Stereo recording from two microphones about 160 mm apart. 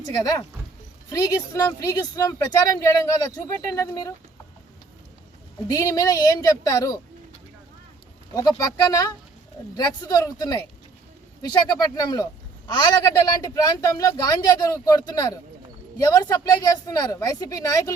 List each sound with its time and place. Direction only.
0.0 s a man's voice: 20° left (ahead or behind)
5.7 s a man's voice: 20° left (ahead or behind)
8.4 s a man's voice: 20° left (ahead or behind)